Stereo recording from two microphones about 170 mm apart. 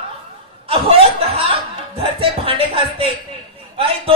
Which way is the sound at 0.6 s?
35° right (ahead or behind).